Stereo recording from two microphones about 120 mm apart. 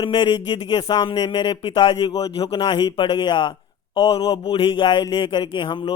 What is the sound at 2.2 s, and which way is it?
A man's voice, 55° left (ahead or behind).